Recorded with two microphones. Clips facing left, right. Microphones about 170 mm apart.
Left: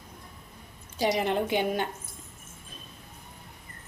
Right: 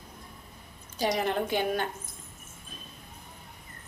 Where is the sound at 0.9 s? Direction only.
15° left (ahead or behind).